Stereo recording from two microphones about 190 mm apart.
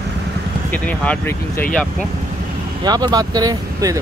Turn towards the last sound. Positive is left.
turn(degrees=-20)  # may be behind; listen again after turning